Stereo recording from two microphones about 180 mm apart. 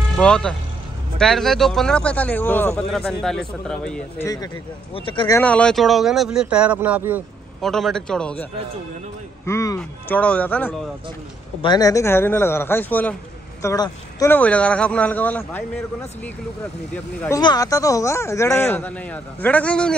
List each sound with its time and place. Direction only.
0.2 s a man's voice: 5° left (ahead or behind)
4.9 s speech: 30° left (ahead or behind)
5.4 s a man's voice: 5° left (ahead or behind); by 7.2 s 10° right (ahead or behind)
7.6 s a man's voice: centre (ahead or behind)
9.5 s speech: 15° left (ahead or behind)
11.6 s speech: 20° left (ahead or behind)
17.4 s speech: 20° left (ahead or behind); by 20.0 s 5° left (ahead or behind)